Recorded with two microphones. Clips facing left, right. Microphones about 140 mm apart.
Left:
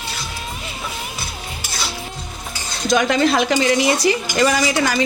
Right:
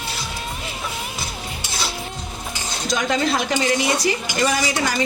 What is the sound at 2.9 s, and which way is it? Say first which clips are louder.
Speech: left 5 dB; 65° left (ahead or behind).